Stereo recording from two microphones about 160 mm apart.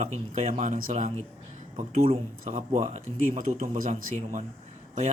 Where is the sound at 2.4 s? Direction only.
55° right (ahead or behind).